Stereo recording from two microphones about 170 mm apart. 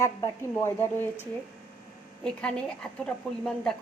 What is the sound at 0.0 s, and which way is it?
Speech, 15° left (ahead or behind).